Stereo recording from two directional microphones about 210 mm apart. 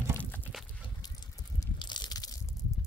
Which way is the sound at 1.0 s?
20° left (ahead or behind).